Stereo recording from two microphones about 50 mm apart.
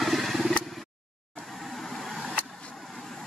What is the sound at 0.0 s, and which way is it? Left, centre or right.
Vehicle, centre.